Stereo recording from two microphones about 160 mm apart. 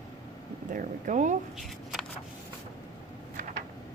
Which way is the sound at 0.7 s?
55° right (ahead or behind).